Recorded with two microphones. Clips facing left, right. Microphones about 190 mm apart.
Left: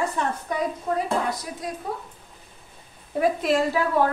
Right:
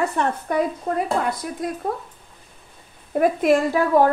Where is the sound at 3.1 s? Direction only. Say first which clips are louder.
Right 4 dB; 50° right (ahead or behind).